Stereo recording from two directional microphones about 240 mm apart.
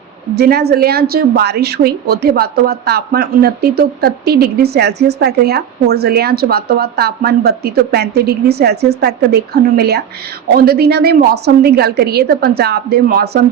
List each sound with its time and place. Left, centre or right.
0.3 s a woman's voice: right